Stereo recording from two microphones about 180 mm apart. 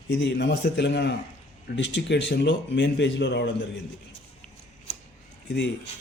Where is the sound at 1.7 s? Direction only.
85° left.